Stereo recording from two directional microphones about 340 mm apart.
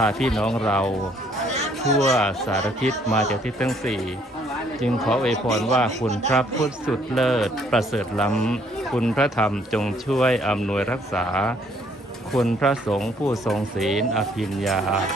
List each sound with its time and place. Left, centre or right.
0.0 s speech: centre
1.5 s chatter: centre
2.0 s speech: centre